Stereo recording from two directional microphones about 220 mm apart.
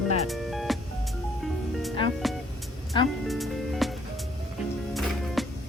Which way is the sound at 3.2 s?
Centre (ahead or behind).